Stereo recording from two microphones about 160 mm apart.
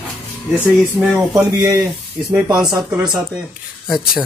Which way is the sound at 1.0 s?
Centre (ahead or behind).